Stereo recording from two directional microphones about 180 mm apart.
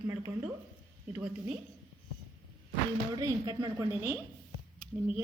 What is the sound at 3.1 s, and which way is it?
A woman's voice, 20° right (ahead or behind).